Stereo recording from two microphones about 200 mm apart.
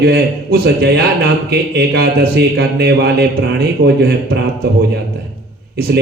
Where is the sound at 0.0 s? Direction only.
55° right (ahead or behind).